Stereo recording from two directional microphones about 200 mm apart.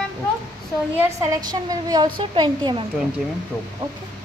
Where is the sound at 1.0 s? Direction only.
15° right (ahead or behind).